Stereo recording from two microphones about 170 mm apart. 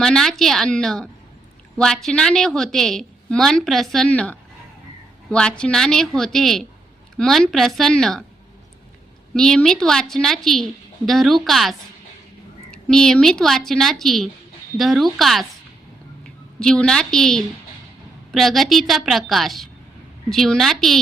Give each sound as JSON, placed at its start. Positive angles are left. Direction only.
{"t": 0.0, "sound": "a woman's voice", "side_deg": 5}
{"t": 9.3, "sound": "a woman's voice", "side_deg": 5}
{"t": 16.6, "sound": "a woman's voice", "side_deg": 5}